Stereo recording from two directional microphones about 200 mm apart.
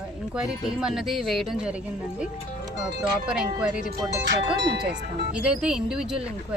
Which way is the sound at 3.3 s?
5° right (ahead or behind).